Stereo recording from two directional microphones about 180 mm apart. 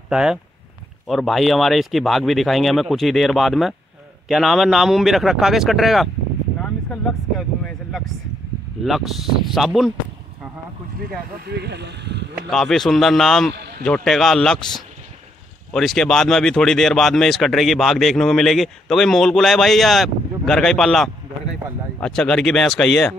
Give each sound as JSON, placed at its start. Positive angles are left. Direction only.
{"t": 0.1, "sound": "speech", "side_deg": -5}
{"t": 6.6, "sound": "vehicle", "side_deg": 5}
{"t": 8.8, "sound": "speech", "side_deg": 0}
{"t": 11.4, "sound": "speech", "side_deg": -65}
{"t": 12.4, "sound": "speech", "side_deg": 0}
{"t": 13.6, "sound": "a sound", "side_deg": -65}
{"t": 13.8, "sound": "speech", "side_deg": 5}
{"t": 15.7, "sound": "speech", "side_deg": 0}